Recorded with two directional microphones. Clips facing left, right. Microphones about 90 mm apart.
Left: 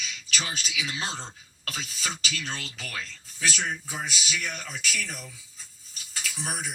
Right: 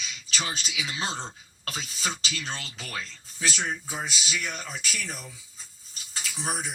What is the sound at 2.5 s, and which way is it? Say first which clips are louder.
Speech: even; 30° right (ahead or behind).